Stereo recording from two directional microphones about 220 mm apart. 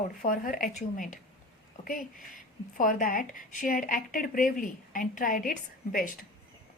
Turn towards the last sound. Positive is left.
turn(degrees=35)  # may be behind; listen again after turning